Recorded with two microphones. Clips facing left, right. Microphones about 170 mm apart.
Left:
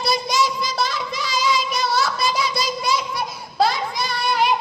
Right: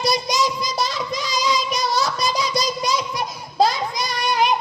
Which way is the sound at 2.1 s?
Centre (ahead or behind).